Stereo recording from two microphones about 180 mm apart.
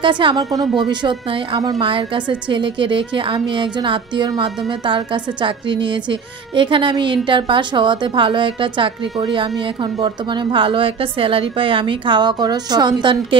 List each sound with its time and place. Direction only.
0.0 s a woman's voice: 25° right (ahead or behind)